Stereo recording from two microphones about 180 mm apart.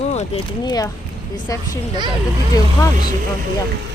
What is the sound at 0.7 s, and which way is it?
Speech, 20° left (ahead or behind).